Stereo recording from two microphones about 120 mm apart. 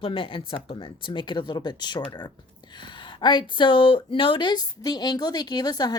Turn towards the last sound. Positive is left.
turn(degrees=35)  # may be behind; listen again after turning